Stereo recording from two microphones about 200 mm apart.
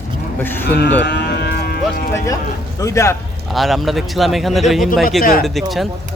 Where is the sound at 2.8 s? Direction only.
15° left (ahead or behind).